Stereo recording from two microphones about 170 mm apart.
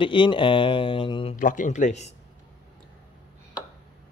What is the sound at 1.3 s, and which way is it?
Speech, 50° left (ahead or behind).